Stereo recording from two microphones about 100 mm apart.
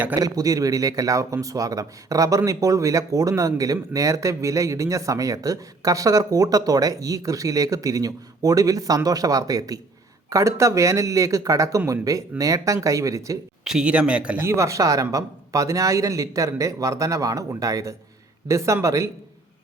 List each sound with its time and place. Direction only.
0.2 s a man's voice: 40° right (ahead or behind)
13.7 s speech: 10° right (ahead or behind)
14.4 s a man's voice: 30° right (ahead or behind)